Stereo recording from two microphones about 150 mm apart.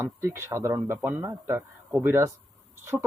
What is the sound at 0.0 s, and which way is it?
Speech, 15° right (ahead or behind).